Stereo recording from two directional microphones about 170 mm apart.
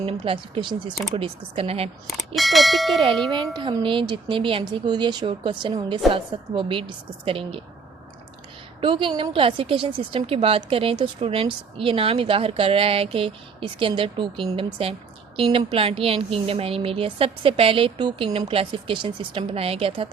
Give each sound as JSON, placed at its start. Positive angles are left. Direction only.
{"t": 0.0, "sound": "a woman's voice", "side_deg": -30}
{"t": 2.0, "sound": "speech", "side_deg": 0}
{"t": 3.5, "sound": "a woman's voice", "side_deg": -25}
{"t": 8.8, "sound": "a woman's voice", "side_deg": -30}